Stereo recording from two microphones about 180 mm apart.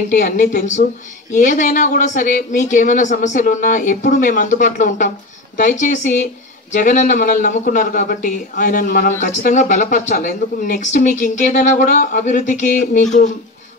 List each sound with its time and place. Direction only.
0.1 s speech: 45° left (ahead or behind)